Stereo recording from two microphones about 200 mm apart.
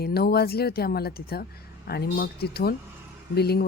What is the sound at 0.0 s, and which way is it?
Speech, 50° left (ahead or behind).